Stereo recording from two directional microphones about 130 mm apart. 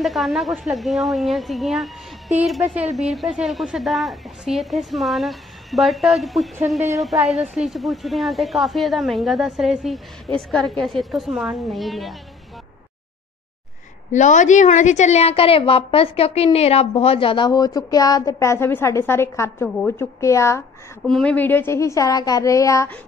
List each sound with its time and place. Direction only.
0.0 s a woman's voice: centre (ahead or behind)
7.5 s a woman's voice: centre (ahead or behind)
14.1 s a woman's voice: 70° left (ahead or behind); by 17.5 s 45° left (ahead or behind)
17.5 s a woman's voice: 30° left (ahead or behind)
21.1 s a woman's voice: 10° left (ahead or behind); by 22.8 s 25° left (ahead or behind)